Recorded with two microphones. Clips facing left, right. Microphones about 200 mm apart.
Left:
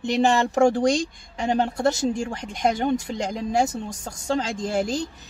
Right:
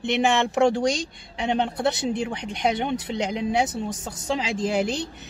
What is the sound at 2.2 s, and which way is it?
Speech, centre (ahead or behind).